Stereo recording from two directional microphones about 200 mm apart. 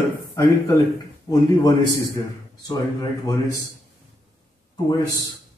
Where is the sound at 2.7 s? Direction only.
20° left (ahead or behind).